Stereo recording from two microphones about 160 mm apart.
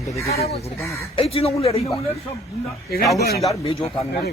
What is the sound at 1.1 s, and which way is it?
Speech, 35° left (ahead or behind).